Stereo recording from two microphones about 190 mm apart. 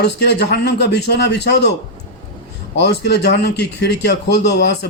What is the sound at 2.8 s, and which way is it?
A man's voice, 60° left (ahead or behind).